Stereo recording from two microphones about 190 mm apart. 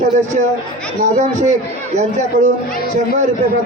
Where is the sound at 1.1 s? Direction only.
40° right (ahead or behind).